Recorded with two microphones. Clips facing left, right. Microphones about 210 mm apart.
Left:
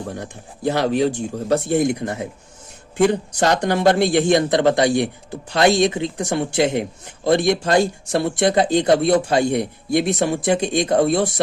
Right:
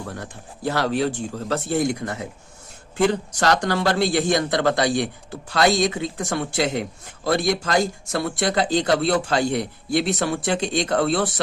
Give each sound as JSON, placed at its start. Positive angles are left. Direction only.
{"t": 0.0, "sound": "a man's voice", "side_deg": 15}